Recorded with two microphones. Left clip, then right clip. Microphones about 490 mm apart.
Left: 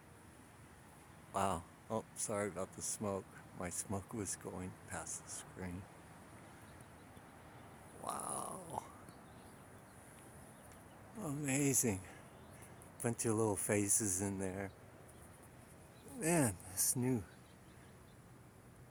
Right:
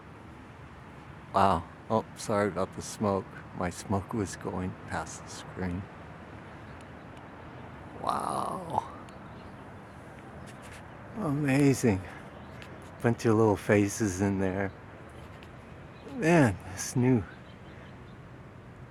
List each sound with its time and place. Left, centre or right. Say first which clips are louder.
1.3 s speech: right 13 dB; left
8.0 s speech: right 13 dB; left
11.2 s speech: right 12 dB; left
13.0 s speech: right 12 dB; left
16.2 s speech: right 12 dB; left